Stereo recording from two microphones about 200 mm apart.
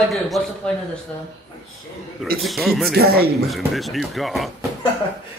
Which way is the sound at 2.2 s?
Centre (ahead or behind).